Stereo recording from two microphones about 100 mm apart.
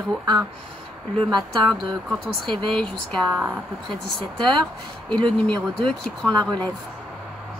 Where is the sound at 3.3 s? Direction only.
20° right (ahead or behind).